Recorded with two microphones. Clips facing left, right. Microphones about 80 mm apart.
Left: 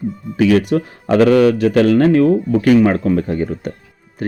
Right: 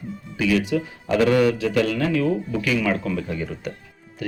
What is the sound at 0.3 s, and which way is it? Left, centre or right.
A man's voice, left.